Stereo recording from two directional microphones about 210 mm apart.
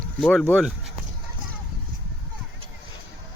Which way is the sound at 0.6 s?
Centre (ahead or behind).